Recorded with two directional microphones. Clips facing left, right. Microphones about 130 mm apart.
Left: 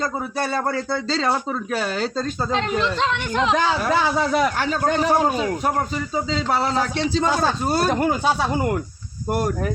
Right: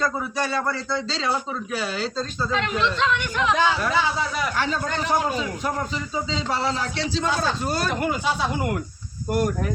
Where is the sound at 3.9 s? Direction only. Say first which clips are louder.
Left 5 dB; 50° left (ahead or behind).